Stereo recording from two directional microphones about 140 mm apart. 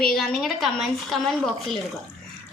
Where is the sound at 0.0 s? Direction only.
5° left (ahead or behind).